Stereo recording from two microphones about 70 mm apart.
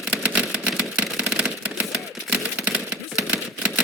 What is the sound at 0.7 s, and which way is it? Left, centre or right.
Typewriter, centre.